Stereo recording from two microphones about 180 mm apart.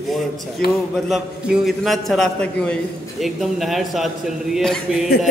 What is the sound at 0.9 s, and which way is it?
A man's voice, centre (ahead or behind).